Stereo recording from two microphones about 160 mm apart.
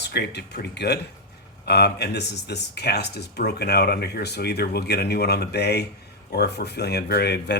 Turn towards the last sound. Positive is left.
turn(degrees=90)